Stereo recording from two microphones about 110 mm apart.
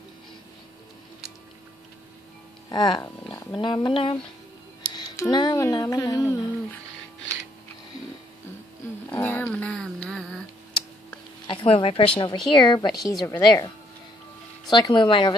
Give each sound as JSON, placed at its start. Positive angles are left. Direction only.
{"t": 2.7, "sound": "a woman's voice", "side_deg": 40}
{"t": 5.3, "sound": "speech", "side_deg": 40}
{"t": 5.6, "sound": "music", "side_deg": 30}
{"t": 9.1, "sound": "a sound", "side_deg": 20}
{"t": 11.4, "sound": "a woman's voice", "side_deg": 55}
{"t": 14.7, "sound": "a woman's voice", "side_deg": 45}